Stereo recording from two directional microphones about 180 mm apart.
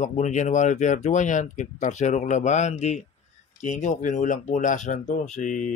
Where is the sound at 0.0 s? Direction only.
40° left (ahead or behind).